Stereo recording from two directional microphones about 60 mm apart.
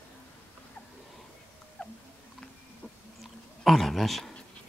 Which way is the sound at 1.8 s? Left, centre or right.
Centre.